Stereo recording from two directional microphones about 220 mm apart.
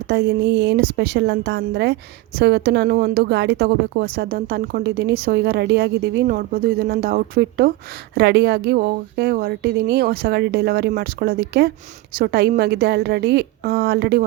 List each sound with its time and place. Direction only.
0.1 s a woman's voice: 50° right (ahead or behind)